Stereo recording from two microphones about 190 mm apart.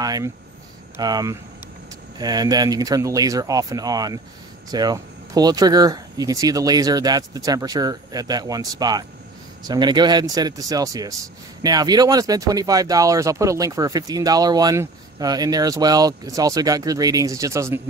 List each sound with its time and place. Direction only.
0.0 s speech: 20° right (ahead or behind)